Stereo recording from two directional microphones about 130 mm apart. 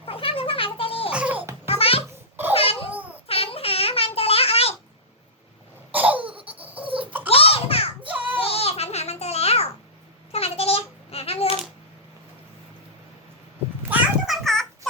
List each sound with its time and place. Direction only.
0.0 s cat: 45° left (ahead or behind)
1.1 s music: 10° right (ahead or behind)
1.7 s a sound: 45° left (ahead or behind)
2.6 s babbling: 45° left (ahead or behind)
5.9 s laughter: 10° right (ahead or behind)
6.2 s laughter: 45° right (ahead or behind)
6.6 s baby laughter: 10° right (ahead or behind)
6.8 s a sound: 45° right (ahead or behind)
7.3 s babbling: 50° left (ahead or behind)
8.0 s child singing: 10° right (ahead or behind)
8.4 s babbling: 50° left (ahead or behind)
10.3 s a sound: 50° left (ahead or behind)
13.9 s a sound: centre (ahead or behind)